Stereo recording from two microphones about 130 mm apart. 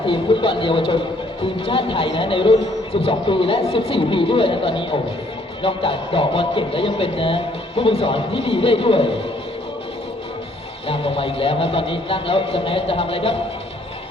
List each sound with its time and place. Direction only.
0.0 s a man's voice: 40° left (ahead or behind)
10.8 s speech: 45° left (ahead or behind)